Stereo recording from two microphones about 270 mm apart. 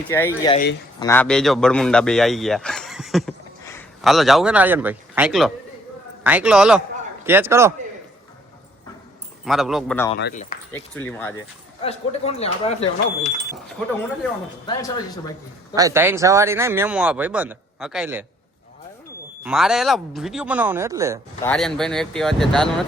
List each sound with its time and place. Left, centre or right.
0.1 s a man's voice: centre
3.6 s a sound: centre
4.0 s a man's voice: centre
9.4 s a man's voice: centre
11.8 s speech: left
14.7 s speech: centre
15.7 s speech: centre
19.5 s a man's voice: centre
21.4 s a man's voice: centre